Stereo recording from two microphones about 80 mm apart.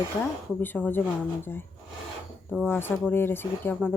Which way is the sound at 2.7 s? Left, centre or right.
Left.